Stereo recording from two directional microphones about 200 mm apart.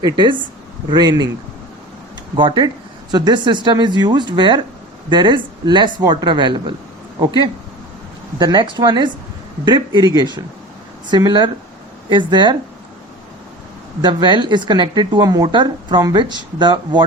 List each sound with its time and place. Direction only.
0.0 s speech: 25° right (ahead or behind)
2.3 s speech: 25° right (ahead or behind)
8.4 s speech: 20° right (ahead or behind)
14.0 s speech: 25° right (ahead or behind)